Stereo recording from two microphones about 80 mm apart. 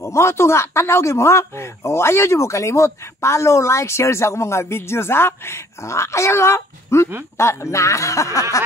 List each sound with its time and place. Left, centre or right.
0.0 s speech: left